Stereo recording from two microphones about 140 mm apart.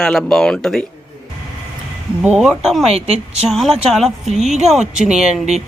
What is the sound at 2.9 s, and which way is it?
Speech, 45° right (ahead or behind).